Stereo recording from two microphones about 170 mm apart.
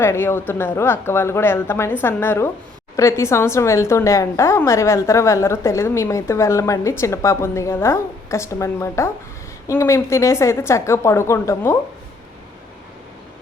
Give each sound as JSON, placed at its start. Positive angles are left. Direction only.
{"t": 0.0, "sound": "a woman's voice", "side_deg": 15}